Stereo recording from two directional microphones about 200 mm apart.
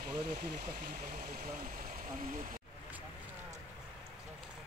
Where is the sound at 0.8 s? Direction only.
45° right (ahead or behind).